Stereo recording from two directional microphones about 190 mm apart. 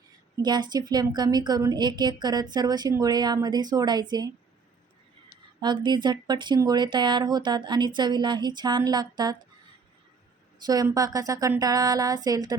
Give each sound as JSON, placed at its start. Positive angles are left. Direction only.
{"t": 0.4, "sound": "speech", "side_deg": -20}
{"t": 5.5, "sound": "speech", "side_deg": -25}
{"t": 10.7, "sound": "speech", "side_deg": -20}